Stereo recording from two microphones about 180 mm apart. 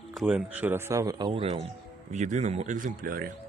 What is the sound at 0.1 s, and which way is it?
Speech, centre (ahead or behind).